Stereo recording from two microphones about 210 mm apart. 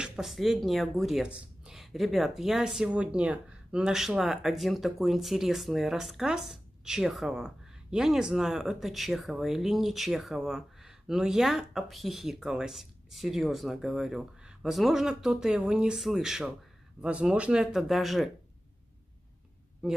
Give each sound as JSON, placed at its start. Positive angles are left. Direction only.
{"t": 0.0, "sound": "speech", "side_deg": 0}
{"t": 19.8, "sound": "speech", "side_deg": -5}